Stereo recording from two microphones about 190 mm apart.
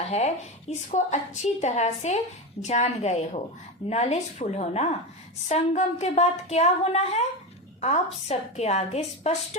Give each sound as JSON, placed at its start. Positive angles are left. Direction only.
{"t": 0.1, "sound": "a woman's voice", "side_deg": 35}